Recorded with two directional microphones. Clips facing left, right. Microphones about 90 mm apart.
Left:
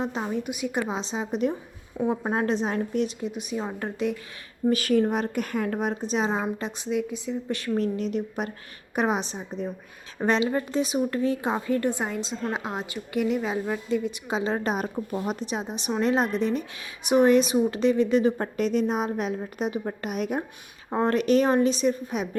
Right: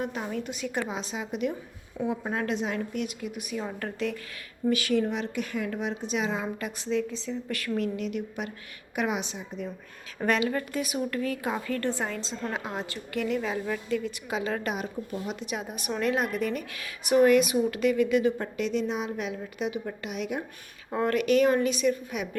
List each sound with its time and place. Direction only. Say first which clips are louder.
0.0 s speech: left 3 dB; 25° left (ahead or behind)
4.7 s a woman's voice: left 4 dB; 40° left (ahead or behind)
6.4 s a woman's voice: left 3 dB; 25° left (ahead or behind); by 15.4 s 40° left (ahead or behind)
15.4 s a woman's voice: left 3 dB; 25° left (ahead or behind); by 20.4 s 45° left (ahead or behind)
20.9 s a woman's voice: left 2 dB; 30° left (ahead or behind)